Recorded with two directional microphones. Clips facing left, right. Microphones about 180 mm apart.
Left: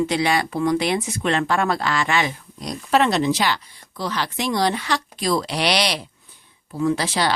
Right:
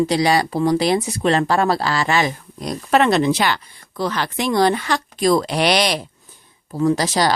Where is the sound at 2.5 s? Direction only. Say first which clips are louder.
Right 2 dB; 55° right (ahead or behind).